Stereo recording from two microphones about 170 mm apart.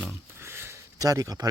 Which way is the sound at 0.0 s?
15° right (ahead or behind).